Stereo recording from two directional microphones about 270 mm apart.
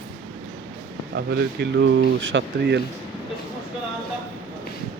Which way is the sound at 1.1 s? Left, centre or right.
Right.